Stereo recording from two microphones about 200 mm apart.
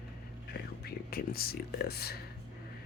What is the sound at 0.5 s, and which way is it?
Speech, 50° left (ahead or behind).